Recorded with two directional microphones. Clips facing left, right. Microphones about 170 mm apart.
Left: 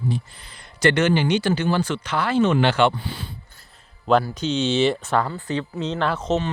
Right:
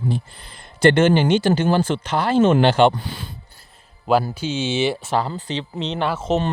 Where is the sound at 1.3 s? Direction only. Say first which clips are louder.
Right 4 dB; 45° right (ahead or behind).